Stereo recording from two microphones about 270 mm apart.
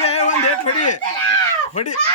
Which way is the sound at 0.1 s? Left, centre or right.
Left.